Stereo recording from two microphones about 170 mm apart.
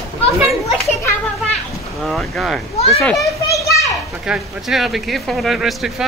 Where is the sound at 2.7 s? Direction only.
35° left (ahead or behind).